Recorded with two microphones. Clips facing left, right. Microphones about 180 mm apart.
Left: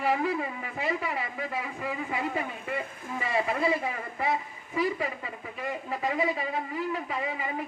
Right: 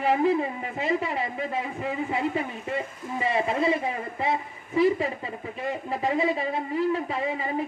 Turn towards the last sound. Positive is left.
turn(degrees=-30)  # may be behind; listen again after turning